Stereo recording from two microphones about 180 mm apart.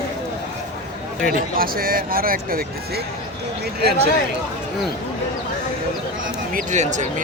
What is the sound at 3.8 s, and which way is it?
Speech, 65° right (ahead or behind).